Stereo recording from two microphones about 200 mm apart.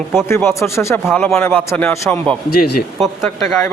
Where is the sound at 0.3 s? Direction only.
10° left (ahead or behind).